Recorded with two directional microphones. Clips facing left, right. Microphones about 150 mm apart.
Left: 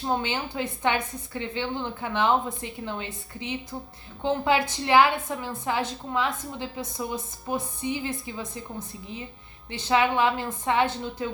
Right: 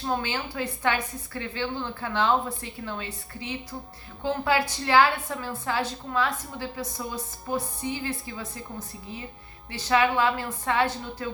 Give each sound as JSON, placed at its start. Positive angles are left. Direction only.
{"t": 0.1, "sound": "a woman's voice", "side_deg": 20}
{"t": 9.7, "sound": "a woman's voice", "side_deg": 20}